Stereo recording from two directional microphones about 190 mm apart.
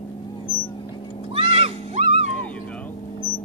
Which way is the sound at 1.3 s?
30° right (ahead or behind).